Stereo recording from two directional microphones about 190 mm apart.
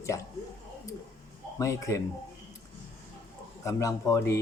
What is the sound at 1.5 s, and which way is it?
Speech, 15° left (ahead or behind).